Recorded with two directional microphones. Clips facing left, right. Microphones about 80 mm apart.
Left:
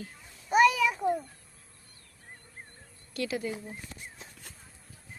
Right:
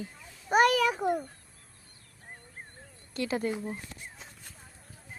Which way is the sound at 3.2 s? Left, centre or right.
Right.